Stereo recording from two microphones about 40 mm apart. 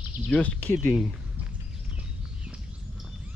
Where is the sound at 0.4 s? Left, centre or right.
Left.